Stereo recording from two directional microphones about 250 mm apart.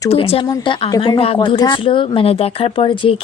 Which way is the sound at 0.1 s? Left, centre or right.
Left.